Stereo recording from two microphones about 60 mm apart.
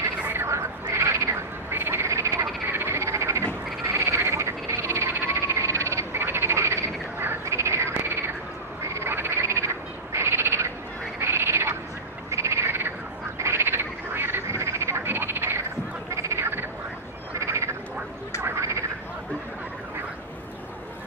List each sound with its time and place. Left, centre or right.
0.3 s a sound: right
0.9 s frog: right
1.7 s frog: right
2.7 s frog: right
8.8 s frog: right
9.1 s frog: right
16.1 s frog: right